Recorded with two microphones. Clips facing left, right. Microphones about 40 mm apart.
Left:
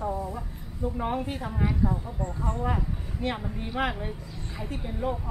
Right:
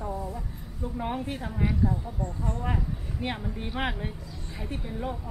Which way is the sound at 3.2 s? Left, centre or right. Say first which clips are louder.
Left 2 dB; centre.